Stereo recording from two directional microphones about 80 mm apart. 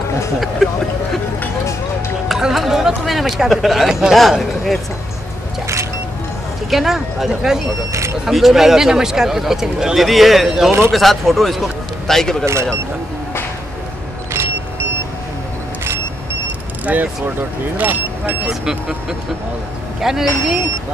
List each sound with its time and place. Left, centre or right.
2.2 s speech: centre
6.7 s speech: centre
7.9 s speech: right
8.3 s a man's voice: centre
14.3 s vehicle: right
16.8 s speech: right
18.5 s speech: centre